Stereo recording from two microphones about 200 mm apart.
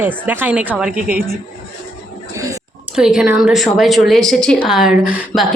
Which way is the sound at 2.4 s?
15° right (ahead or behind).